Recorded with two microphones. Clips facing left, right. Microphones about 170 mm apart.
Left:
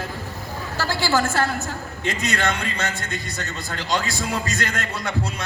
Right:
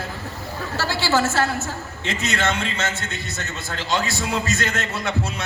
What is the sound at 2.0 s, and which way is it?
Speech, 25° right (ahead or behind).